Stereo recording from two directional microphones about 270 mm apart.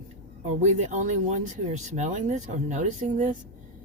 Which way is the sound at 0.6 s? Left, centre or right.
Right.